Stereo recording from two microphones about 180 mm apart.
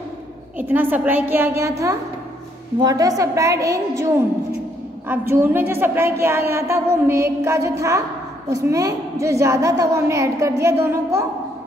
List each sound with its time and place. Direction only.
0.6 s a woman's voice: 10° right (ahead or behind)